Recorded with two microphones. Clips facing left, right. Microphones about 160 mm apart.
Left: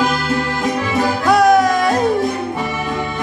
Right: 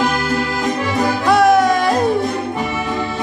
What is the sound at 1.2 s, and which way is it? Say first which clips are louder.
Music: even; centre (ahead or behind).